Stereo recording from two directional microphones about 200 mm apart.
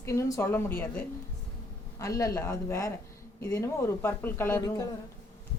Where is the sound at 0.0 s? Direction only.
15° left (ahead or behind).